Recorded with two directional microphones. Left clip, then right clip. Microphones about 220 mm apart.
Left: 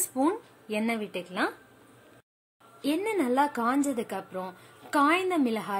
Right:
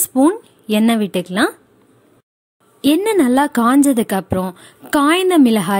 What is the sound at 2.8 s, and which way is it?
A woman's voice, 45° right (ahead or behind).